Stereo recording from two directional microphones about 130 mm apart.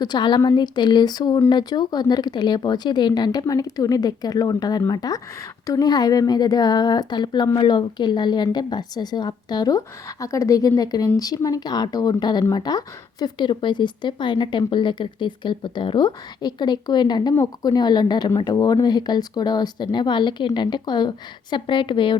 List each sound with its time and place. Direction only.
0.0 s a woman's voice: 35° left (ahead or behind)